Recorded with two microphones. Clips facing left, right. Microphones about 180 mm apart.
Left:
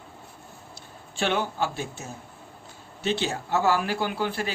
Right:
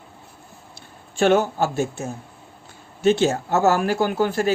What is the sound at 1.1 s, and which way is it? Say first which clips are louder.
Speech: right 9 dB; 45° right (ahead or behind).